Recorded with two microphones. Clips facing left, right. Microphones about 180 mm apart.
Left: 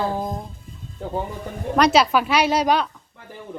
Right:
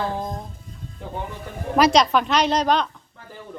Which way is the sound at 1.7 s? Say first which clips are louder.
Even; centre (ahead or behind).